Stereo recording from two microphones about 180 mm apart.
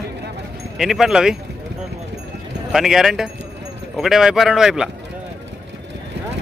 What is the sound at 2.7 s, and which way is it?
A man's voice, centre (ahead or behind).